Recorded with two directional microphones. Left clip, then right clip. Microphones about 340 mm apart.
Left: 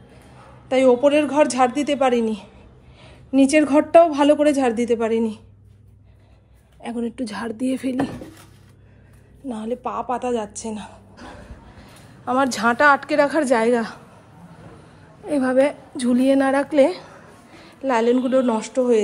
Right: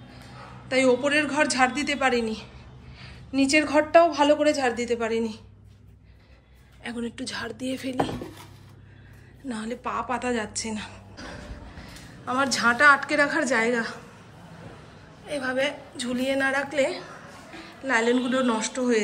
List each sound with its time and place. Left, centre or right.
0.7 s a woman's voice: centre
6.8 s a woman's voice: centre
9.5 s a woman's voice: centre
15.2 s a woman's voice: centre